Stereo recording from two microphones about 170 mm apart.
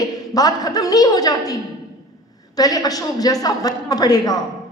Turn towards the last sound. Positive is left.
turn(degrees=20)  # may be behind; listen again after turning